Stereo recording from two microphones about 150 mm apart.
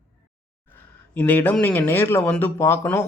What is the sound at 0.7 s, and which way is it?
Speech, 10° left (ahead or behind).